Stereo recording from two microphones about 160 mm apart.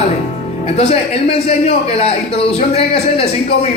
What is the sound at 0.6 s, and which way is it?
A man's voice, 40° left (ahead or behind).